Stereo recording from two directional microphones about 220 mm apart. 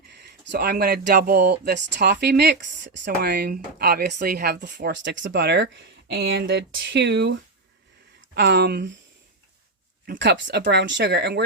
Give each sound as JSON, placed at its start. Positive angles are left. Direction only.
{"t": 0.1, "sound": "speech", "side_deg": -50}
{"t": 8.4, "sound": "speech", "side_deg": -50}
{"t": 10.1, "sound": "speech", "side_deg": -55}